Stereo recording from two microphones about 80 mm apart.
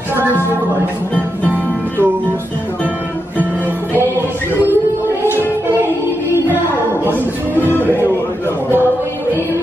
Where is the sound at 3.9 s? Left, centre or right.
Right.